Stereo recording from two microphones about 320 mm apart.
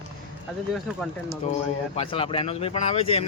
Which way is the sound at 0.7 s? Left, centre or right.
Centre.